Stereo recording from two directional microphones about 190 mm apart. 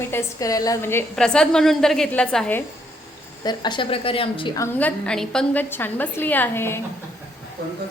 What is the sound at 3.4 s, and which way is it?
A woman's voice, 25° left (ahead or behind).